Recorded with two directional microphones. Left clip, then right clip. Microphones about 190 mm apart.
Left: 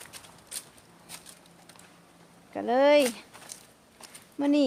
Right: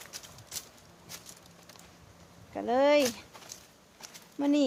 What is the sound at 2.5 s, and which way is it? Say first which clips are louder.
Speech: left 3 dB; 20° left (ahead or behind).